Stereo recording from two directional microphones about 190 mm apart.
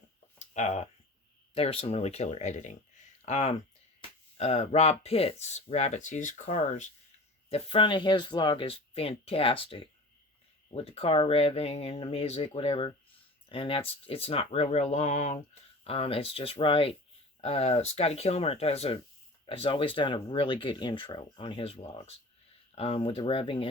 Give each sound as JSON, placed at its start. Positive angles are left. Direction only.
{"t": 0.3, "sound": "a sound", "side_deg": 40}
{"t": 1.5, "sound": "speech", "side_deg": 30}
{"t": 7.5, "sound": "speech", "side_deg": 30}